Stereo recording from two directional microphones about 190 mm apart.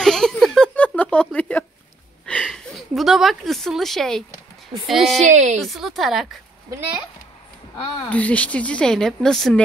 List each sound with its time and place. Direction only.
0.0 s a sound: 5° left (ahead or behind)
2.2 s a woman's voice: 5° left (ahead or behind)
5.2 s a woman's voice: 40° right (ahead or behind)
5.6 s a woman's voice: centre (ahead or behind)
7.7 s a woman's voice: 5° left (ahead or behind)